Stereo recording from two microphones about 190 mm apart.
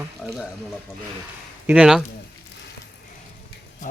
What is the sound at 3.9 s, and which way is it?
Speech, 45° left (ahead or behind).